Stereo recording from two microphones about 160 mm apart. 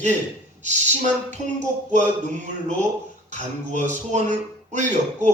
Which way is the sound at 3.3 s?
50° right (ahead or behind).